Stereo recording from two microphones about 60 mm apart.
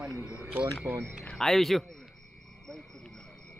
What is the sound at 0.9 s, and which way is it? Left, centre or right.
Speech, right.